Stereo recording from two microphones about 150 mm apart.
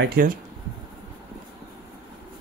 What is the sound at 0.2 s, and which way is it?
Speech, 75° right (ahead or behind).